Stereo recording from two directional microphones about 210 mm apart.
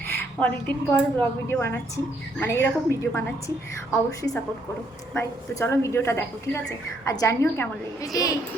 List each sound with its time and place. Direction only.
0.3 s a woman's voice: 5° left (ahead or behind)
5.1 s a woman's voice: 10° left (ahead or behind)